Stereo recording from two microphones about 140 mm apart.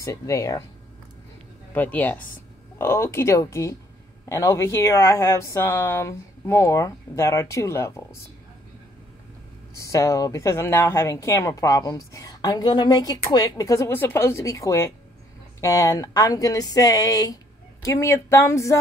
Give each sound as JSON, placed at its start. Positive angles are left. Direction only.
{"t": 0.0, "sound": "speech", "side_deg": 20}
{"t": 1.7, "sound": "speech", "side_deg": 10}
{"t": 9.8, "sound": "speech", "side_deg": 20}